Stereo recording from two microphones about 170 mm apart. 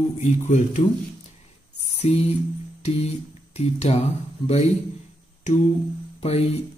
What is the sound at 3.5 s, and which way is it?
Speech, 40° left (ahead or behind).